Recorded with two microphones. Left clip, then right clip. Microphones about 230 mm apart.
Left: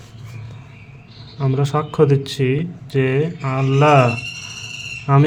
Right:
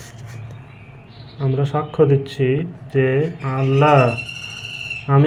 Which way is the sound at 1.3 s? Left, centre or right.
Left.